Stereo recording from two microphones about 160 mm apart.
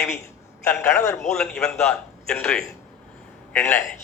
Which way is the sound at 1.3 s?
5° left (ahead or behind).